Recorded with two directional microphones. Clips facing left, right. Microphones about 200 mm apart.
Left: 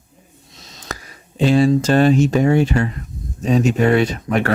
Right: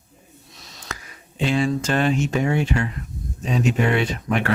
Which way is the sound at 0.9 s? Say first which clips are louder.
Left 5 dB; 35° left (ahead or behind).